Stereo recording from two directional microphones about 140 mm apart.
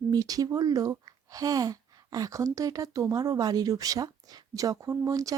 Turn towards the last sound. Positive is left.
turn(degrees=-25)  # may be behind; listen again after turning